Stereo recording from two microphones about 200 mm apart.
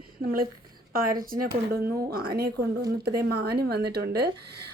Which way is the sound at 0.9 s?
45° right (ahead or behind).